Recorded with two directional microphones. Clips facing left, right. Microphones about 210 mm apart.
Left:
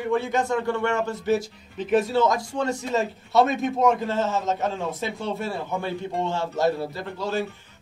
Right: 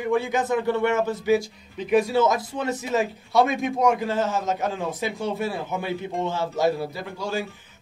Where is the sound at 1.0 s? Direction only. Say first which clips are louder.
Right 2 dB; centre (ahead or behind).